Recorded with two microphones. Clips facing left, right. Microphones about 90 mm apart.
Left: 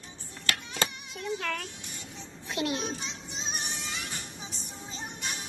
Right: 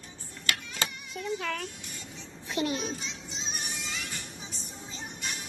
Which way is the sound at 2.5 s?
5° left (ahead or behind).